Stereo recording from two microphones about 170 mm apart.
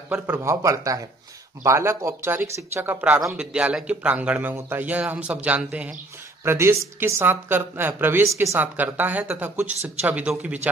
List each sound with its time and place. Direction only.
0.1 s speech: 15° right (ahead or behind)